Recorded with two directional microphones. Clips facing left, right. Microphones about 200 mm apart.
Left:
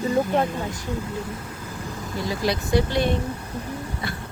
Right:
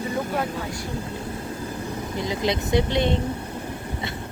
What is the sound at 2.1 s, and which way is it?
Speech, 20° right (ahead or behind).